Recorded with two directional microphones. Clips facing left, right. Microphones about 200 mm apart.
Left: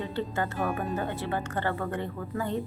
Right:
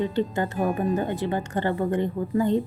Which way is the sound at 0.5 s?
35° right (ahead or behind).